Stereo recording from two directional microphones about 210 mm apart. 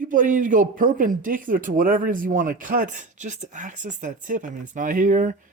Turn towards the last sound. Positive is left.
turn(degrees=-35)  # may be behind; listen again after turning